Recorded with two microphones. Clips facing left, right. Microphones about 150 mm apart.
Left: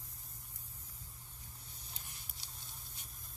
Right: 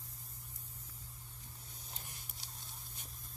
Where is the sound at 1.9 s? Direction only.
45° right (ahead or behind).